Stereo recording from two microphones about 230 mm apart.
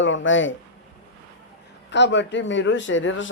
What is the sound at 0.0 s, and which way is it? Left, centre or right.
Speech, left.